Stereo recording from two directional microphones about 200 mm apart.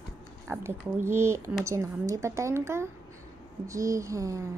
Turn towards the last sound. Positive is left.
turn(degrees=-15)  # may be behind; listen again after turning